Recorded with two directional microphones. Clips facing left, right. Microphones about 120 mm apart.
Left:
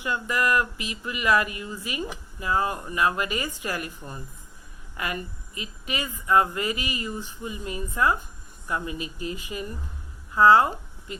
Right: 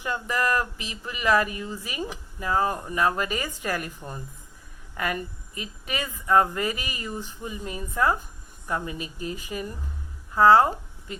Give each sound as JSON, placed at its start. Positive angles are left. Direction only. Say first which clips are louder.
{"t": 0.0, "sound": "speech", "louder": "left 1 dB", "side_deg": -35}
{"t": 5.5, "sound": "speech", "louder": "even", "side_deg": -40}